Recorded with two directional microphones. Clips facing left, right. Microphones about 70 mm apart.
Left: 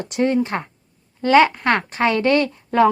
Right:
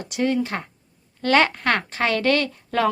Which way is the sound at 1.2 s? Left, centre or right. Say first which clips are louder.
Left 5 dB; centre.